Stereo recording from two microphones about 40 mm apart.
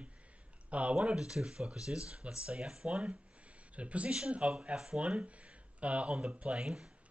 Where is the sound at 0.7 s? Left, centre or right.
Right.